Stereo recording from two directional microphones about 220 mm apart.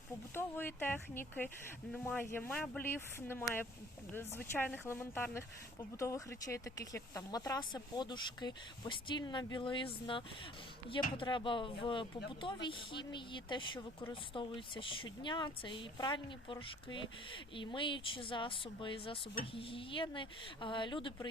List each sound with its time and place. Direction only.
0.3 s speech: 10° left (ahead or behind)